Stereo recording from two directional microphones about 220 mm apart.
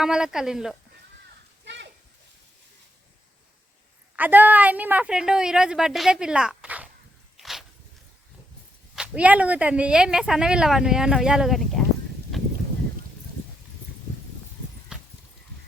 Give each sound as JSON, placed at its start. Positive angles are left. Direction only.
{"t": 0.0, "sound": "speech", "side_deg": -5}
{"t": 1.6, "sound": "a sound", "side_deg": -55}
{"t": 4.1, "sound": "speech", "side_deg": -10}
{"t": 7.3, "sound": "a sound", "side_deg": 0}
{"t": 9.0, "sound": "speech", "side_deg": -5}
{"t": 14.9, "sound": "horse", "side_deg": -5}